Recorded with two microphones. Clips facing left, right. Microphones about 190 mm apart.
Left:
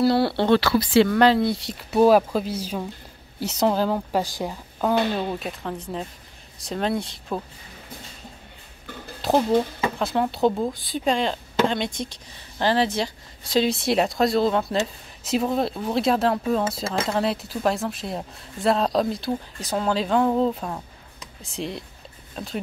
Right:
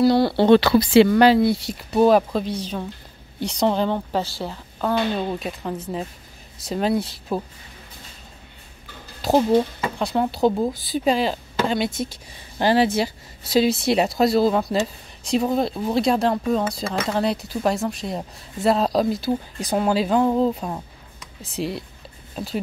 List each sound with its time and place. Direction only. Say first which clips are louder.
0.0 s speech: right 3 dB; centre (ahead or behind)
0.5 s speech: right 5 dB; 20° right (ahead or behind)
1.0 s speech: right 3 dB; 5° right (ahead or behind)
5.3 s speech: right 2 dB; centre (ahead or behind)
9.2 s speech: right 2 dB; centre (ahead or behind)
19.6 s speech: right 3 dB; 15° right (ahead or behind)